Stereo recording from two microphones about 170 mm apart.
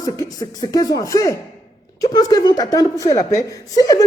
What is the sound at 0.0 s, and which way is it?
A woman's voice, 20° left (ahead or behind).